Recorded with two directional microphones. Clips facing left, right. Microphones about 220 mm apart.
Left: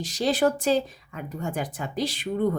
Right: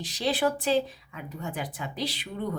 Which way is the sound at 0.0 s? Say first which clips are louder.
Left 4 dB; 45° left (ahead or behind).